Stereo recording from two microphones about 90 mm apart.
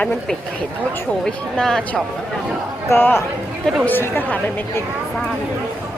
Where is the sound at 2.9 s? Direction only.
25° left (ahead or behind).